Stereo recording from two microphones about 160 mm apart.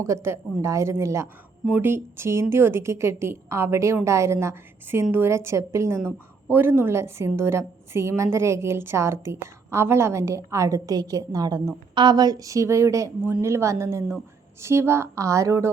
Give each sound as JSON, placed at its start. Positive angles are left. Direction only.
{"t": 0.0, "sound": "a woman's voice", "side_deg": -15}